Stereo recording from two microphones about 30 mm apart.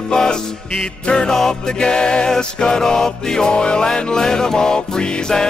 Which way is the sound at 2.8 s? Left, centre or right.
Centre.